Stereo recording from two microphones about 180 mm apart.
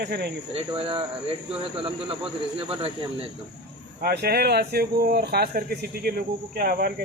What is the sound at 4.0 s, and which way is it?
Speech, 60° right (ahead or behind).